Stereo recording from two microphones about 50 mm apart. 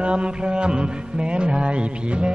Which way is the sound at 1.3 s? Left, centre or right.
Centre.